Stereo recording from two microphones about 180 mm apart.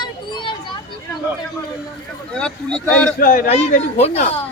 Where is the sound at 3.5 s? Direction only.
35° left (ahead or behind).